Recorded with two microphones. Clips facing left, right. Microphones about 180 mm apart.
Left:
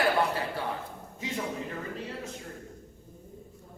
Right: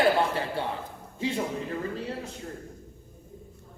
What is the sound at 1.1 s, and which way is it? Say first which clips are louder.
Speech: right 5 dB; 30° right (ahead or behind).